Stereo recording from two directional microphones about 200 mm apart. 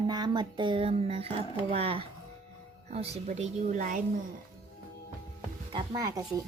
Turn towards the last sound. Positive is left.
turn(degrees=-20)  # may be behind; listen again after turning